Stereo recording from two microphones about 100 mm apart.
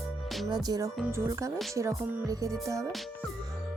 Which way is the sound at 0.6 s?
40° right (ahead or behind).